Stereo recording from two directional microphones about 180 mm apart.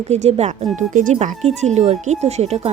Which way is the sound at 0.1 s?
35° right (ahead or behind).